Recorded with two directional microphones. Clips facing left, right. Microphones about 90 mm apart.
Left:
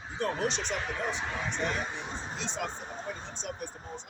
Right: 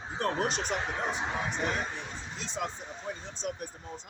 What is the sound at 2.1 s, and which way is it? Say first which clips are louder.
Speech: left 4 dB; 35° left (ahead or behind).